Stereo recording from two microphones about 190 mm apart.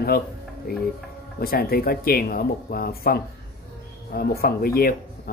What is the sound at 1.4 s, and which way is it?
Speech, 50° left (ahead or behind).